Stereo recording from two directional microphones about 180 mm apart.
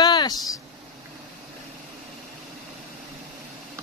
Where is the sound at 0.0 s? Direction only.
25° left (ahead or behind).